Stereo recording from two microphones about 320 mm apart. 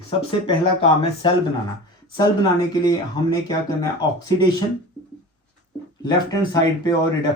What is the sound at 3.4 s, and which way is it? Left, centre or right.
Speech, centre.